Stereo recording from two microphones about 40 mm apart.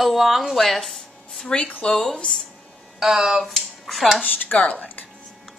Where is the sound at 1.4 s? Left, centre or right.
Left.